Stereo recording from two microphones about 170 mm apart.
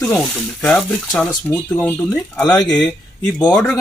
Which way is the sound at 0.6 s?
5° left (ahead or behind).